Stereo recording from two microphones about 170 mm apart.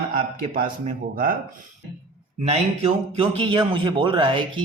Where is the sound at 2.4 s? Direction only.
40° right (ahead or behind).